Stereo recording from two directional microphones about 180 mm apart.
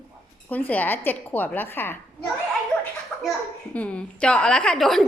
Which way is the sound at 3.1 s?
5° left (ahead or behind).